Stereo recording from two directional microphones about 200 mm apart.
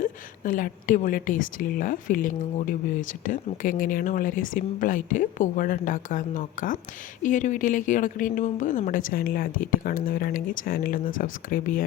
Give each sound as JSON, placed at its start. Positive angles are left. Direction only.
{"t": 0.0, "sound": "speech", "side_deg": 40}